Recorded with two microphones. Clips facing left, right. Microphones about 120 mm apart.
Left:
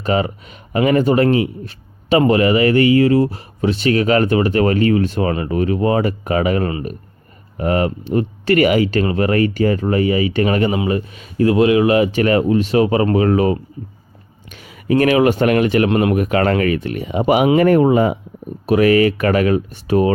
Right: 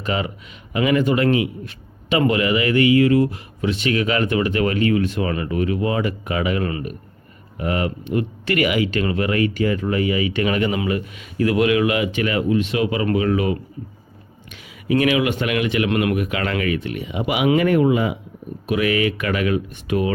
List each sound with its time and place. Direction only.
0.0 s a man's voice: 40° left (ahead or behind)